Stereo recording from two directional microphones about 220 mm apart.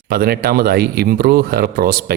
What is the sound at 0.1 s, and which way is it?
Speech, 45° right (ahead or behind).